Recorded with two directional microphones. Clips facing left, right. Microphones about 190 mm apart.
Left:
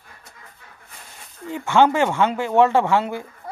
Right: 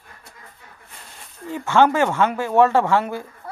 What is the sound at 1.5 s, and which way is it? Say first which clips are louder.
Speech: even; 15° left (ahead or behind).